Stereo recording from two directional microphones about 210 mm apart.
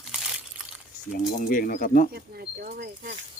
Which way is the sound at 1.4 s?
40° left (ahead or behind).